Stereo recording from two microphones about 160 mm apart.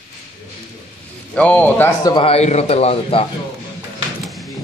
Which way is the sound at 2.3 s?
40° left (ahead or behind).